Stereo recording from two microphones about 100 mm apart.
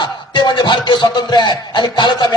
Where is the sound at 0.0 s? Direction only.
50° left (ahead or behind).